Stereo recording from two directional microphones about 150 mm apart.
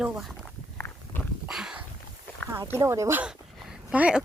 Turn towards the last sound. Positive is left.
turn(degrees=-10)  # may be behind; listen again after turning